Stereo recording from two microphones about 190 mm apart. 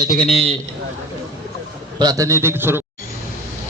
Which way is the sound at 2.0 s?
20° right (ahead or behind).